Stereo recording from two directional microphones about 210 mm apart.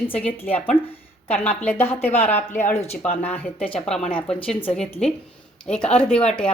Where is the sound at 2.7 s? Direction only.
30° left (ahead or behind).